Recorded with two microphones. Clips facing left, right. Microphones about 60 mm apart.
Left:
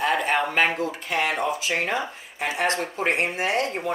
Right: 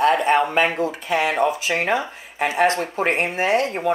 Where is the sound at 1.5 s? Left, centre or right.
Right.